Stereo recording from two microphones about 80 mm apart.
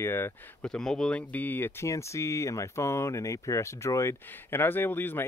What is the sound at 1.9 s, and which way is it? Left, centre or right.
Speech, left.